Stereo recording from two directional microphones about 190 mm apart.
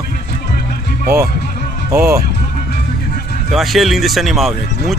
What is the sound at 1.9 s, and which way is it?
Speech, 10° right (ahead or behind).